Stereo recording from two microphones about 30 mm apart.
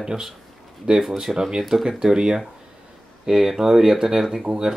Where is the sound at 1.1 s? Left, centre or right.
Centre.